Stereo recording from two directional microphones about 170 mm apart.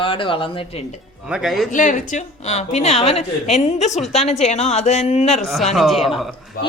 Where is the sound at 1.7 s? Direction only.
50° left (ahead or behind).